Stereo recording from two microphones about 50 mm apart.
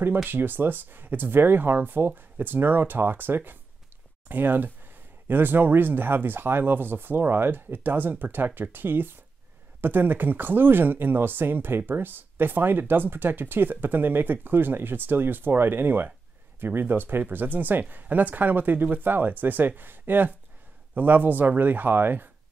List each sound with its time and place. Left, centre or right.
0.3 s speech: right